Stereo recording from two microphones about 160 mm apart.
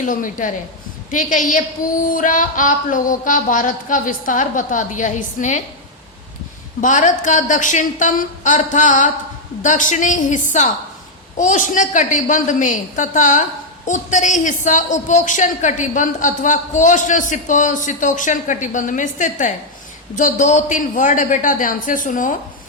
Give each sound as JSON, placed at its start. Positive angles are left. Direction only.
{"t": 0.0, "sound": "a woman's voice", "side_deg": 55}
{"t": 6.8, "sound": "a woman's voice", "side_deg": 50}